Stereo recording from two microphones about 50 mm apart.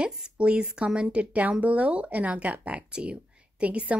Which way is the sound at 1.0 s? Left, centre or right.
Right.